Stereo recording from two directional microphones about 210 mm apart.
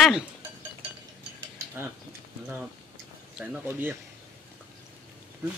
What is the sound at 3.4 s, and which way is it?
Speech, 5° right (ahead or behind).